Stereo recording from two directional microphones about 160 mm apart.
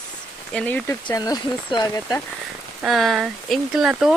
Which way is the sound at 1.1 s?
25° left (ahead or behind).